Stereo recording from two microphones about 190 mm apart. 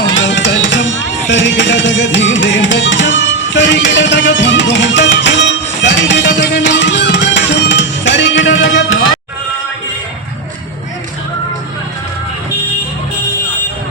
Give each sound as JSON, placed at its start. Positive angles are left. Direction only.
{"t": 0.0, "sound": "music", "side_deg": 75}